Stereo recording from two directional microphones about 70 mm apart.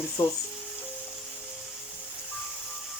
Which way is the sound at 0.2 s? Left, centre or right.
Left.